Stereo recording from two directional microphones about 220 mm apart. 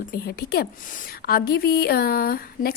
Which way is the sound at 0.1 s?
45° left (ahead or behind).